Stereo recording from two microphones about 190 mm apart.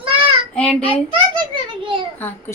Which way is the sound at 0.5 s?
5° left (ahead or behind).